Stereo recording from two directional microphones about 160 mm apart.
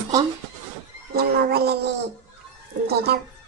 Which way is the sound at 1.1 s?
75° right (ahead or behind).